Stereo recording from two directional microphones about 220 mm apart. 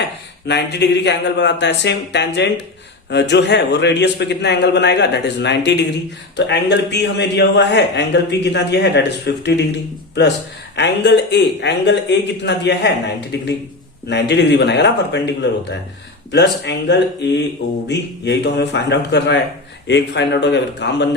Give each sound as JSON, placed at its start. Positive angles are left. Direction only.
{"t": 0.4, "sound": "a man's voice", "side_deg": 50}
{"t": 10.8, "sound": "a man's voice", "side_deg": 50}